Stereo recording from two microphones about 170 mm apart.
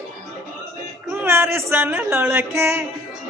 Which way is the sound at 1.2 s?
15° right (ahead or behind).